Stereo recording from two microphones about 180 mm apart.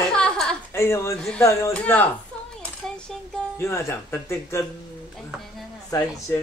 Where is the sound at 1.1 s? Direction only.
Centre (ahead or behind).